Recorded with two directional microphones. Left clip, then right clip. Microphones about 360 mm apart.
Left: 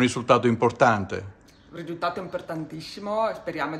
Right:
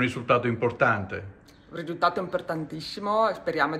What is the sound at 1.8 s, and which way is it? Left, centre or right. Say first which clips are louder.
Speech: right 3 dB; centre.